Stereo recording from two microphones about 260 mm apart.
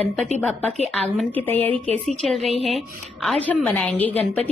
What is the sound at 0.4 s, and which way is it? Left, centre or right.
A woman's voice, centre.